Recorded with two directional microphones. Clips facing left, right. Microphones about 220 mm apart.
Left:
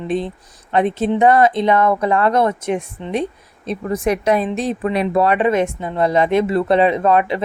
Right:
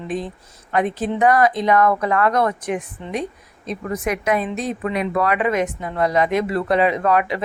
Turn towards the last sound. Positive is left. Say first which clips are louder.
# left 3 dB
turn(degrees=25)  # may be behind; listen again after turning